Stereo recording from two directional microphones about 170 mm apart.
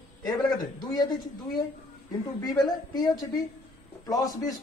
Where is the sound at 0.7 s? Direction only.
25° left (ahead or behind).